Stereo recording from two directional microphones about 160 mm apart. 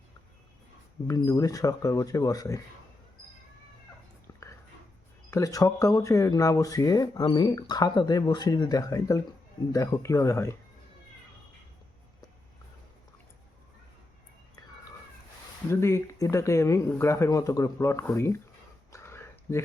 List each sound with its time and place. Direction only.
1.0 s speech: 20° left (ahead or behind)
4.3 s dog: 20° left (ahead or behind)
5.3 s speech: 20° left (ahead or behind)
15.7 s speech: 15° left (ahead or behind)
18.9 s a sound: 15° left (ahead or behind)